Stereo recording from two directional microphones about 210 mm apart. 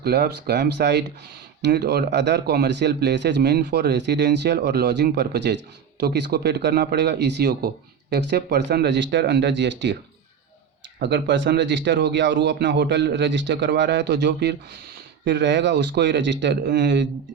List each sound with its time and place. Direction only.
0.0 s a man's voice: 50° right (ahead or behind)
11.0 s a man's voice: 55° right (ahead or behind)